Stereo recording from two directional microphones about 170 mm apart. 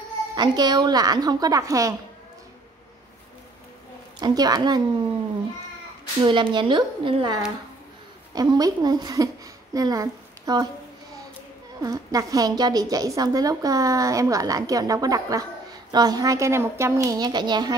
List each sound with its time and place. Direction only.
0.4 s a woman's voice: 25° right (ahead or behind)
4.2 s a woman's voice: 25° right (ahead or behind)
6.2 s a woman's voice: 30° right (ahead or behind)
11.8 s a woman's voice: 20° right (ahead or behind)